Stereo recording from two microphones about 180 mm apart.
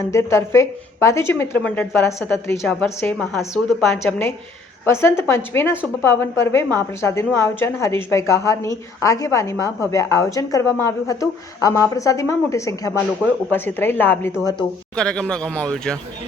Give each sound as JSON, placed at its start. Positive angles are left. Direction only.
{"t": 0.1, "sound": "a woman's voice", "side_deg": 15}
{"t": 3.0, "sound": "speech", "side_deg": 5}
{"t": 3.8, "sound": "a woman's voice", "side_deg": 15}